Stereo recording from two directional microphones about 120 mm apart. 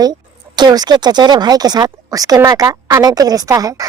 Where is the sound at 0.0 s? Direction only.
35° right (ahead or behind).